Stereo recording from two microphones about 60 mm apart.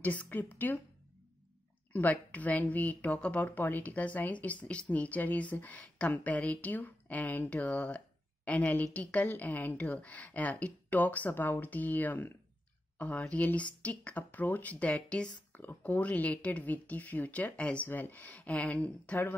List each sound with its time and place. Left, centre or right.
0.0 s a woman's voice: left
1.9 s speech: left
3.4 s speech: left
15.5 s speech: left
17.8 s speech: left